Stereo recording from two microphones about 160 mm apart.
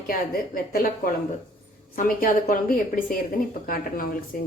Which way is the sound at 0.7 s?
60° left (ahead or behind).